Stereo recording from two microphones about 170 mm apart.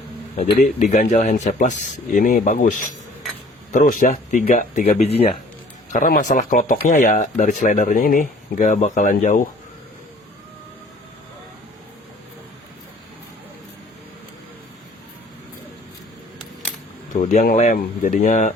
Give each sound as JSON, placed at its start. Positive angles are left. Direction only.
{"t": 0.6, "sound": "speech", "side_deg": 50}
{"t": 4.9, "sound": "speech", "side_deg": 35}
{"t": 5.9, "sound": "speech", "side_deg": 55}
{"t": 17.2, "sound": "speech", "side_deg": 45}